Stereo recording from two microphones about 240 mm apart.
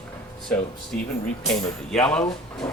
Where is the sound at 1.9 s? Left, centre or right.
Centre.